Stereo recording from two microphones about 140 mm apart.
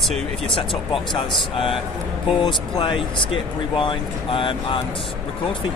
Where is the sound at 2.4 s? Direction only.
35° left (ahead or behind).